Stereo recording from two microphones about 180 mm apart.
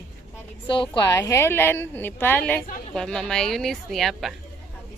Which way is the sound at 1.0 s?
15° left (ahead or behind).